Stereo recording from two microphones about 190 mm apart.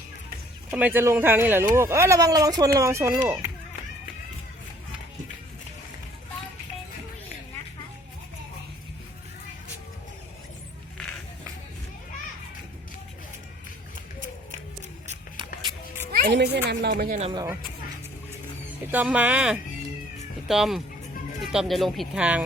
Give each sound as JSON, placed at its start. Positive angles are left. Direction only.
{"t": 0.7, "sound": "speech", "side_deg": -10}
{"t": 16.3, "sound": "a woman's voice", "side_deg": -60}
{"t": 17.3, "sound": "speech", "side_deg": -15}
{"t": 18.9, "sound": "speech", "side_deg": -10}